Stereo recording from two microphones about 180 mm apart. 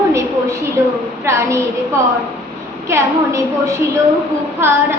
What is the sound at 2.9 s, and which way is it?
A woman's voice, 15° right (ahead or behind).